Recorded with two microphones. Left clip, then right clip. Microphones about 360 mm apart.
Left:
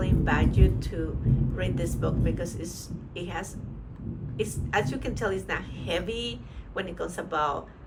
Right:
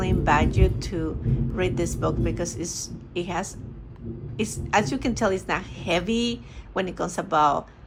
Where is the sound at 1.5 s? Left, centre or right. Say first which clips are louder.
Right 10 dB; centre.